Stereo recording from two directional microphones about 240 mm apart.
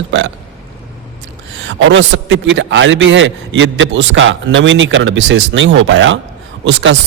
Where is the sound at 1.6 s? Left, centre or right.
Right.